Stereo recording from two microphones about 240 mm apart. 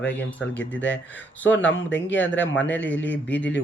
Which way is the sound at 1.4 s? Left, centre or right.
Left.